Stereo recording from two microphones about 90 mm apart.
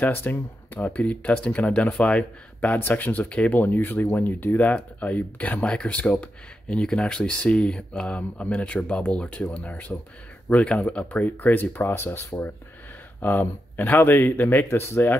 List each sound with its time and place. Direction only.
0.0 s speech: 25° left (ahead or behind)